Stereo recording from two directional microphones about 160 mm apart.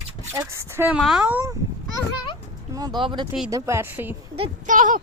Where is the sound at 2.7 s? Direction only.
25° right (ahead or behind).